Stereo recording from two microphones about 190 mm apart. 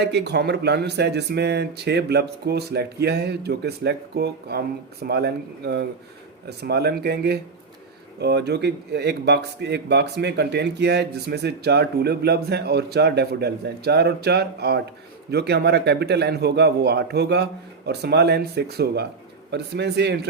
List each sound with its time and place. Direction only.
0.0 s speech: 60° right (ahead or behind)